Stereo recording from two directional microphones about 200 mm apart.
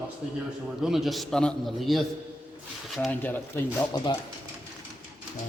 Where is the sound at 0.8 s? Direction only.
Centre (ahead or behind).